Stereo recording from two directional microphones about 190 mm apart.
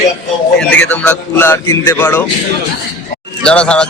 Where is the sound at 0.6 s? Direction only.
5° left (ahead or behind).